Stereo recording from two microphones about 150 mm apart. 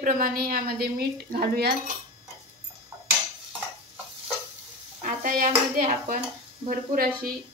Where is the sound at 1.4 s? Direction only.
90° right.